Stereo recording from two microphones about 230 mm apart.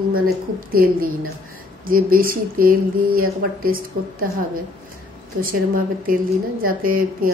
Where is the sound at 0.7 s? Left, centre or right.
Right.